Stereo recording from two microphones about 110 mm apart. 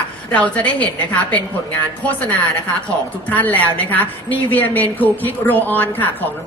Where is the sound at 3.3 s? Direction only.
15° left (ahead or behind).